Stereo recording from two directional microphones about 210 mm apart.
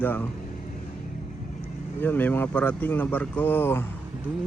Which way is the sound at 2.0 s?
10° left (ahead or behind).